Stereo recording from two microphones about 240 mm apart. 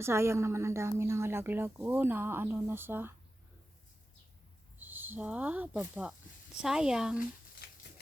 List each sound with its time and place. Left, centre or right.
0.0 s a woman's voice: centre
4.8 s speech: centre
7.6 s typewriter: left